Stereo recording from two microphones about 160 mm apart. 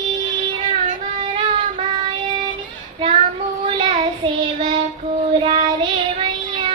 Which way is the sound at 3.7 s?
35° right (ahead or behind).